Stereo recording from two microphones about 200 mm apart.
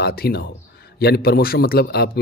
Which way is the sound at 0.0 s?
50° left (ahead or behind).